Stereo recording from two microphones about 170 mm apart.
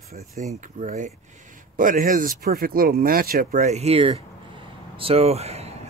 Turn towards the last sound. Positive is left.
turn(degrees=-40)  # may be behind; listen again after turning